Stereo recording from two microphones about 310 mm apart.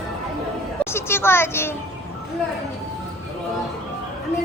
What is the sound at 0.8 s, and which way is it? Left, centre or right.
Speech, centre.